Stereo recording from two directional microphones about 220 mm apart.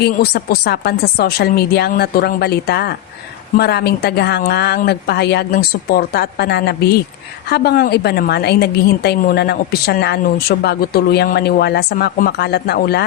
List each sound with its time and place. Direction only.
0.0 s a woman's voice: 45° left (ahead or behind)